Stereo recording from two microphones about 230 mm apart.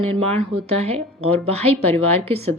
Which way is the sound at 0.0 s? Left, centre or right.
Right.